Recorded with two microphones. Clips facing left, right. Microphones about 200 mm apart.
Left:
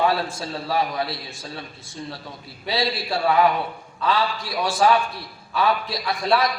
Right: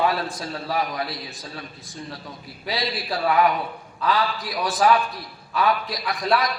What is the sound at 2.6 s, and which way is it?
Speech, 30° left (ahead or behind).